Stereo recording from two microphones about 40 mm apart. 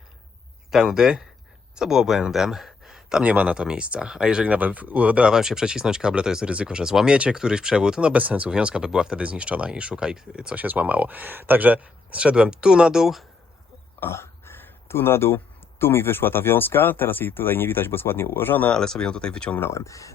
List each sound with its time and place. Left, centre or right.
0.7 s speech: centre
3.2 s speech: right
3.5 s speech: right
5.3 s speech: centre
8.1 s speech: right
9.1 s speech: right
10.5 s speech: right
12.2 s speech: right; by 13.2 s centre
14.0 s a sound: left
15.8 s speech: left
18.7 s speech: centre